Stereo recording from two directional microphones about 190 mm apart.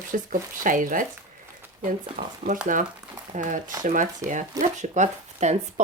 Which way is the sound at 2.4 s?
40° right (ahead or behind).